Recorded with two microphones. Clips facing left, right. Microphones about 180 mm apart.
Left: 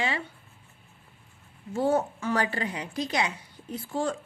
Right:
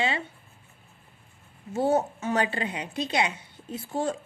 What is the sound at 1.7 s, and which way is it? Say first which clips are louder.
A woman's voice: right 1 dB; 20° right (ahead or behind).